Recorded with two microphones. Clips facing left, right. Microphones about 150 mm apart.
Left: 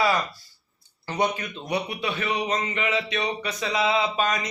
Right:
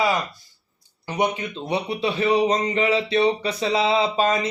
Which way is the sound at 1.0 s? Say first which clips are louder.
Right 2 dB; 20° right (ahead or behind).